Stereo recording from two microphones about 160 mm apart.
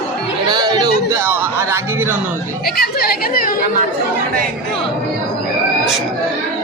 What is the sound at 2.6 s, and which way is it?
Chatter, 75° left (ahead or behind).